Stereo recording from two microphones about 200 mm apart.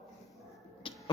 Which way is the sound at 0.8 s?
25° left (ahead or behind).